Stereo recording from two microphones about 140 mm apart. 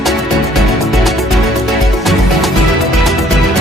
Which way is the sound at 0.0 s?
Centre (ahead or behind).